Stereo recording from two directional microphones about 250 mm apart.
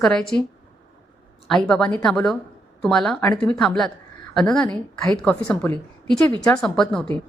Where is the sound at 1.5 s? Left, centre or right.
Centre.